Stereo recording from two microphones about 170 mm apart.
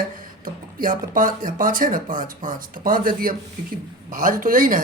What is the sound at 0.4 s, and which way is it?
A man's voice, 55° right (ahead or behind).